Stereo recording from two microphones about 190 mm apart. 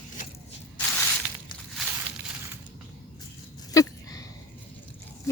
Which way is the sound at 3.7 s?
20° left (ahead or behind).